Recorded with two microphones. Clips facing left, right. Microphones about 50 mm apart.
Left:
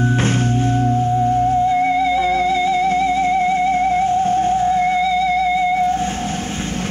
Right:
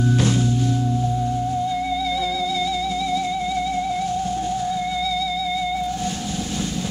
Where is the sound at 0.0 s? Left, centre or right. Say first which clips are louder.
Left 2 dB; left.